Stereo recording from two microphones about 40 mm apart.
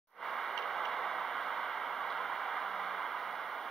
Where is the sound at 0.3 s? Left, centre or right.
Centre.